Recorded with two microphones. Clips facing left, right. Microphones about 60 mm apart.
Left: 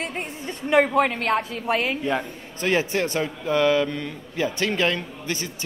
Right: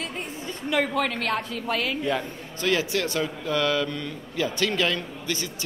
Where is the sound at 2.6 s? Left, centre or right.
Left.